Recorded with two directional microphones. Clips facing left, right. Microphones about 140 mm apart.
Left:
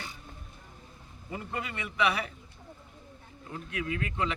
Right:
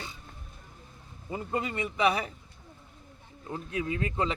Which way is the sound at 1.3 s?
30° right (ahead or behind).